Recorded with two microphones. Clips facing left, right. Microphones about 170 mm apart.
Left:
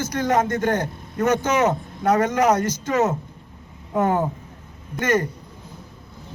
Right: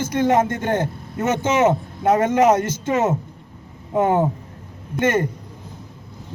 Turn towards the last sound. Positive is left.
turn(degrees=-25)  # may be behind; listen again after turning